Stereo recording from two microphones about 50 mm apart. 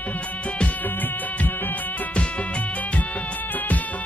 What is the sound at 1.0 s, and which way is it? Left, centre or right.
Music, left.